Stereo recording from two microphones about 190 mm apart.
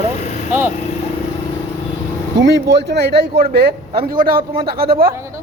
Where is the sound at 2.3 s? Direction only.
65° right (ahead or behind).